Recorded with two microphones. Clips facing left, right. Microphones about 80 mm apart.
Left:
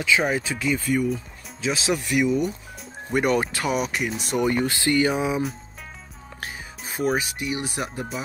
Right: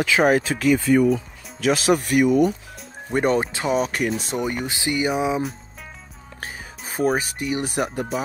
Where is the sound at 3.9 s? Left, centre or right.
Right.